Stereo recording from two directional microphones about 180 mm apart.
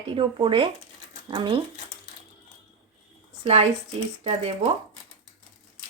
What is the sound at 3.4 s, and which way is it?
Speech, 35° right (ahead or behind).